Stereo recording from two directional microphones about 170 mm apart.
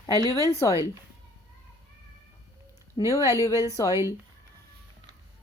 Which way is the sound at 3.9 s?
15° right (ahead or behind).